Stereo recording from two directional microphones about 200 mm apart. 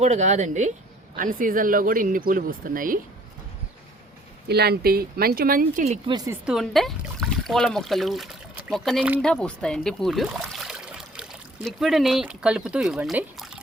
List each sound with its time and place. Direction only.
0.0 s speech: 35° right (ahead or behind)
4.4 s speech: 55° right (ahead or behind); by 6.0 s 40° right (ahead or behind)
6.1 s speech: 20° right (ahead or behind)
6.4 s speech: centre (ahead or behind)